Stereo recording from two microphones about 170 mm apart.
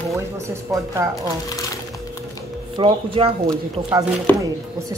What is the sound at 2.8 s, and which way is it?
Speech, 30° right (ahead or behind).